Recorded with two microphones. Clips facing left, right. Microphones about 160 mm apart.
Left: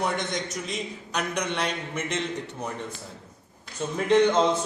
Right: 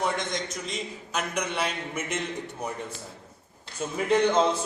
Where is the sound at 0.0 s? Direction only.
Centre (ahead or behind).